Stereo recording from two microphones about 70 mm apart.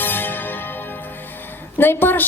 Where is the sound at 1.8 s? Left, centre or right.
Left.